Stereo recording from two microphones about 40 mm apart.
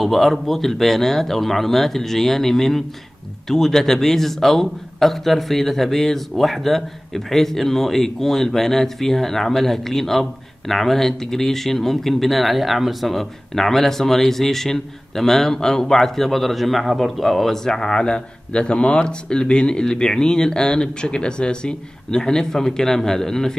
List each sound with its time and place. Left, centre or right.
0.0 s speech: centre
17.6 s speech: centre